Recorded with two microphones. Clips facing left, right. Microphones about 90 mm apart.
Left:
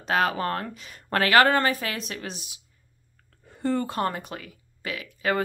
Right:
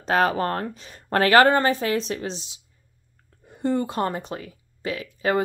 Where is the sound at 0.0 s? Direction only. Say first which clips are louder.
Right 3 dB; 35° right (ahead or behind).